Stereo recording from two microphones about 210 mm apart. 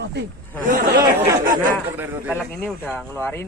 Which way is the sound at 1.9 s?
10° right (ahead or behind).